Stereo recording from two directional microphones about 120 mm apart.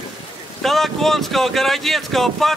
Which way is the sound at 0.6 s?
Centre (ahead or behind).